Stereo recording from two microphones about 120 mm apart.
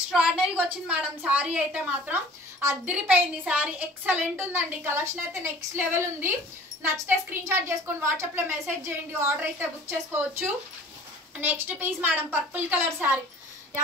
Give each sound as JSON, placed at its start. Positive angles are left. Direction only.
{"t": 0.1, "sound": "a woman's voice", "side_deg": -5}
{"t": 2.9, "sound": "a woman's voice", "side_deg": -10}